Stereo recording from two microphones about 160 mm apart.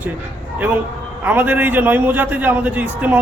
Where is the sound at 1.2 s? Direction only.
10° right (ahead or behind).